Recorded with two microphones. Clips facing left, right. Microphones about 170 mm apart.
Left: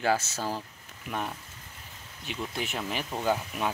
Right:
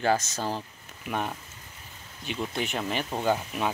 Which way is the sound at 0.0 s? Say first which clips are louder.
Right 2 dB; 5° left (ahead or behind).